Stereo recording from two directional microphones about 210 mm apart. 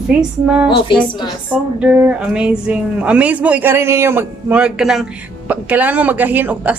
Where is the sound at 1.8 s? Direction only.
5° right (ahead or behind).